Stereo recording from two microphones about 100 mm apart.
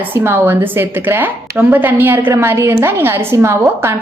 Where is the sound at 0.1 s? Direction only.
20° right (ahead or behind).